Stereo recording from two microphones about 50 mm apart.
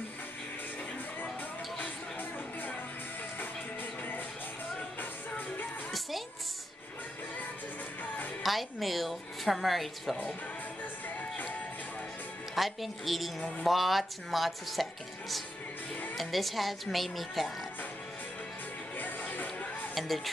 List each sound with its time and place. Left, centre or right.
1.8 s music: left
5.9 s music: centre
8.4 s a woman's voice: centre
11.1 s music: left
12.5 s speech: centre
13.4 s speech: left
13.7 s speech: centre
18.9 s music: left
19.9 s speech: centre